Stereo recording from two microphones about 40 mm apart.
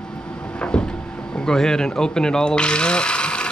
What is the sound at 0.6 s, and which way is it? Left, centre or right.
Cupboard open or close, left.